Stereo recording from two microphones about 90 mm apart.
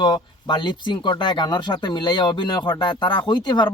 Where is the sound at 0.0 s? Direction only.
55° left (ahead or behind).